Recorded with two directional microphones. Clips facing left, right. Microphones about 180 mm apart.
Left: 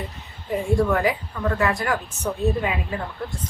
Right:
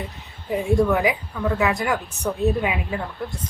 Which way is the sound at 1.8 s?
15° right (ahead or behind).